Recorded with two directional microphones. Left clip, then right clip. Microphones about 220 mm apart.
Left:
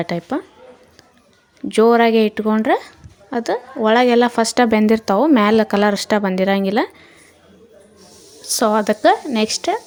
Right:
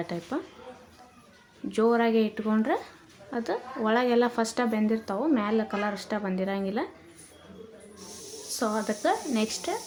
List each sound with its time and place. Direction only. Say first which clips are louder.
0.0 s speech: left 10 dB; 35° left (ahead or behind)
1.7 s speech: left 11 dB; 40° left (ahead or behind)
8.4 s speech: left 13 dB; 45° left (ahead or behind)